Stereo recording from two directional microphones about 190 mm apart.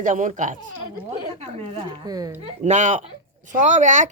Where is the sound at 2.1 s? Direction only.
20° right (ahead or behind).